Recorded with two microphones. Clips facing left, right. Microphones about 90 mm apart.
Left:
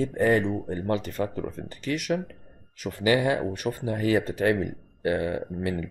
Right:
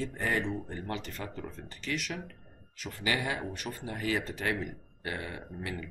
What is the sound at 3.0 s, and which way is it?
Speech, 30° left (ahead or behind).